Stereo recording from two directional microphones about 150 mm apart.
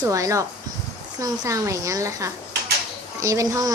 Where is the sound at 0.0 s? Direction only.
20° right (ahead or behind).